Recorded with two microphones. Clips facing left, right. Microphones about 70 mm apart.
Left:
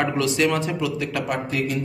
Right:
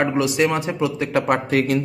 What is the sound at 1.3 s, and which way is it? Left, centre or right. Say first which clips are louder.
Speech: right 7 dB; right.